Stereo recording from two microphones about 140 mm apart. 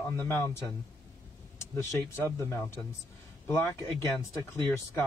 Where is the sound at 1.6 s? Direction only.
20° left (ahead or behind).